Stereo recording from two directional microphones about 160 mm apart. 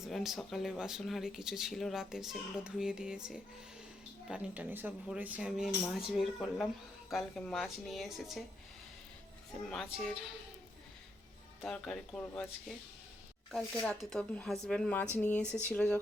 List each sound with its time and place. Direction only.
0.0 s speech: centre (ahead or behind)
9.6 s speech: centre (ahead or behind)
11.6 s speech: 5° left (ahead or behind)